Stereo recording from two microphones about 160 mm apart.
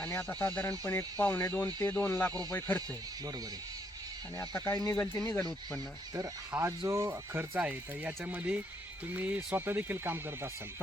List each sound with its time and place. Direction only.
0.0 s speech: 10° left (ahead or behind)
4.4 s speech: 15° left (ahead or behind)
6.1 s speech: 15° right (ahead or behind)